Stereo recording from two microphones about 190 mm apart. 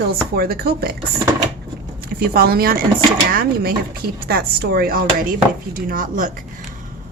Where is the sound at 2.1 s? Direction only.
55° right (ahead or behind).